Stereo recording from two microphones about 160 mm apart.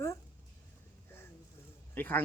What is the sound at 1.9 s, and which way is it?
Speech, 10° left (ahead or behind).